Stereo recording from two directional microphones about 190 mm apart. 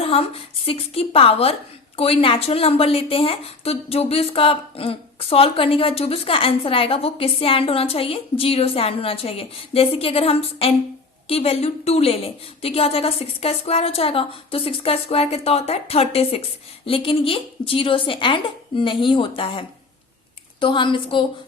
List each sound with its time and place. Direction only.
0.0 s a woman's voice: 30° left (ahead or behind)